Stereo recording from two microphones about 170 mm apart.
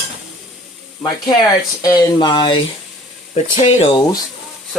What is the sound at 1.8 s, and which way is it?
Speech, 20° left (ahead or behind).